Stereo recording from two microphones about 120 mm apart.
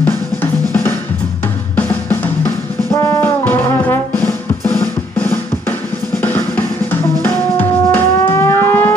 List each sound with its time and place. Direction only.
1.8 s music: 15° left (ahead or behind)
4.7 s drum: 15° left (ahead or behind)